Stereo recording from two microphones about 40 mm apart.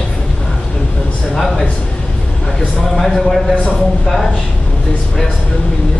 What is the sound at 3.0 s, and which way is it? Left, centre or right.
Speech, centre.